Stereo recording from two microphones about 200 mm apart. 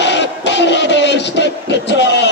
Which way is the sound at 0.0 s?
60° left (ahead or behind).